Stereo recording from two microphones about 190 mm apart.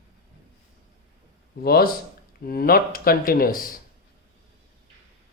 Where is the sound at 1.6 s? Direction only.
55° left (ahead or behind).